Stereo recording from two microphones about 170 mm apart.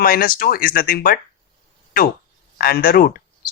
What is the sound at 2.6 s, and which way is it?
Speech, 60° left (ahead or behind).